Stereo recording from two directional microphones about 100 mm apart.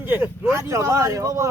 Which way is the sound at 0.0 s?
20° right (ahead or behind).